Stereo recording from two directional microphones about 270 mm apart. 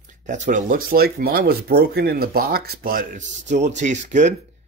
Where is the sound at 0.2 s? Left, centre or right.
Right.